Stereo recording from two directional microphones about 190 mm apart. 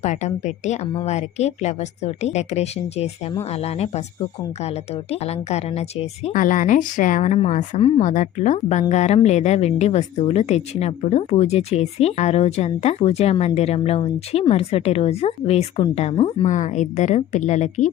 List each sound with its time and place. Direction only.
0.0 s speech: 35° left (ahead or behind)
5.1 s speech: 35° left (ahead or behind)
8.0 s speech: 40° left (ahead or behind)
16.5 s speech: 40° left (ahead or behind)